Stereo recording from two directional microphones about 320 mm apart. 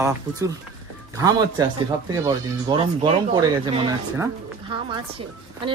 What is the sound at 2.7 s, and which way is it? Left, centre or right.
Speech, centre.